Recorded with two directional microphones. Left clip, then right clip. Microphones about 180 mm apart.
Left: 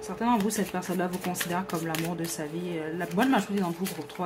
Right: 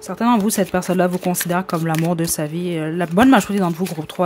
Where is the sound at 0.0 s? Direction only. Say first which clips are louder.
Right 9 dB; 55° right (ahead or behind).